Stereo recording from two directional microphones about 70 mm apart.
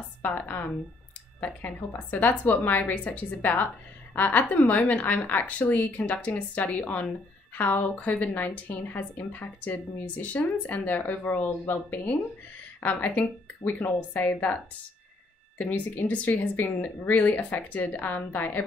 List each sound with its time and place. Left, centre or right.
0.2 s a woman's voice: left